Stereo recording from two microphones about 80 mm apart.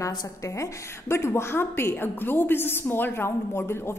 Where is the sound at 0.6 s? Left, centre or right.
Left.